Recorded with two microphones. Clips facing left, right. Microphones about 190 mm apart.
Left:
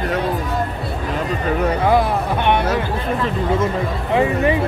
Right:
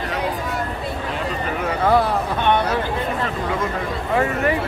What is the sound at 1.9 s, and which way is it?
Speech, 15° left (ahead or behind).